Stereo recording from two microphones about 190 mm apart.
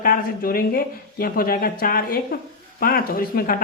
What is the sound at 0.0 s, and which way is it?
Speech, 50° left (ahead or behind).